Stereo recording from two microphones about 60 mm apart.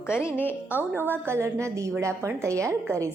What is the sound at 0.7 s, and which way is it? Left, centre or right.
A woman's voice, right.